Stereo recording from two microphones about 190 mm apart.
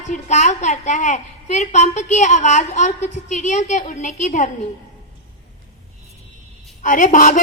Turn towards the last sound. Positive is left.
turn(degrees=45)  # may be behind; listen again after turning